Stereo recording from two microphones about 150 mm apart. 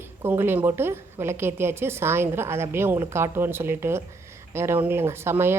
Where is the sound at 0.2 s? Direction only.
15° right (ahead or behind).